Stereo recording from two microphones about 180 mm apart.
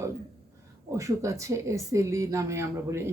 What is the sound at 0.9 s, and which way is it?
A woman's voice, 15° right (ahead or behind).